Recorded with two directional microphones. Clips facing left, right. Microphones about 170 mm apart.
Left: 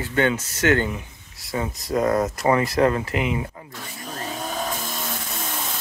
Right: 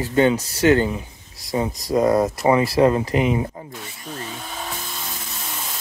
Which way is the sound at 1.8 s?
10° right (ahead or behind).